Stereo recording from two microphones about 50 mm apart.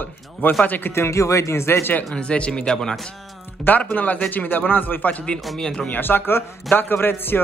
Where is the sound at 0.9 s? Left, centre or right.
Left.